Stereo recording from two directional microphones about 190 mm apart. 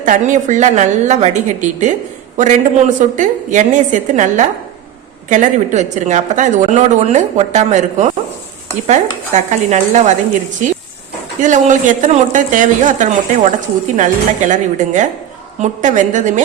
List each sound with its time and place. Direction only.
0.0 s a woman's voice: 45° right (ahead or behind)
11.3 s a woman's voice: 40° right (ahead or behind)